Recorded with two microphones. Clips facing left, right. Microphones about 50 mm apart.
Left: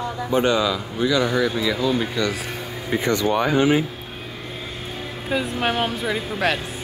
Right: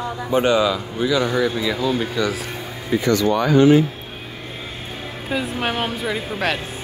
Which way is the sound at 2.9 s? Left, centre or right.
Centre.